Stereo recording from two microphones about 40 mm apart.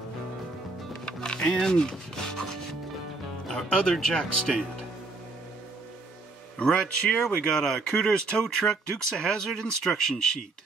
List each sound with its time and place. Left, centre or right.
1.0 s music: left
1.7 s rub: centre
3.4 s speech: centre
6.7 s speech: left
7.2 s speech: centre